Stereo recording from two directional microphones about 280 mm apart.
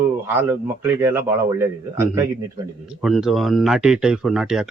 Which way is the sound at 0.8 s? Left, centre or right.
Centre.